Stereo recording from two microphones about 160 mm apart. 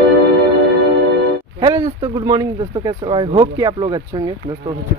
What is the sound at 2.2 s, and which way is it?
Speech, 25° right (ahead or behind).